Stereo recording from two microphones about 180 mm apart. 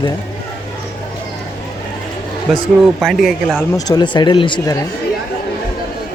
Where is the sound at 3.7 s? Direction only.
20° left (ahead or behind).